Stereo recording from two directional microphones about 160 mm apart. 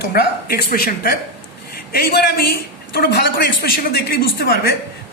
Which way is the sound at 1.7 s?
70° left (ahead or behind).